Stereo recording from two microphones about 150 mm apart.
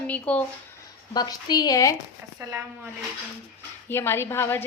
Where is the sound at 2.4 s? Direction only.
20° right (ahead or behind).